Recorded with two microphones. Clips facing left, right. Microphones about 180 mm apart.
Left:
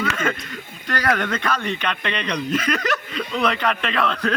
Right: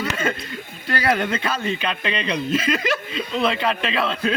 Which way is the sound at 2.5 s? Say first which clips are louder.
Even; 25° right (ahead or behind).